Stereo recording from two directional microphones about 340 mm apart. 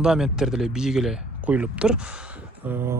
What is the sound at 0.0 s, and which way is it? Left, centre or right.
Speech, centre.